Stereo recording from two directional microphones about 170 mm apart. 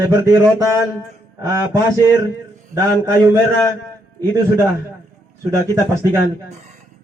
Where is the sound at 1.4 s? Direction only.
20° right (ahead or behind).